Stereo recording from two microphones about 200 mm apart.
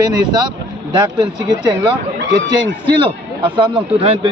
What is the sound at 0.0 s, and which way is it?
A man's voice, 20° right (ahead or behind).